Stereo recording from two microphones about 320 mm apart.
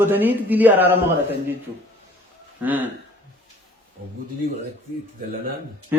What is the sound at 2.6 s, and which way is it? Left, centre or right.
Speech, centre.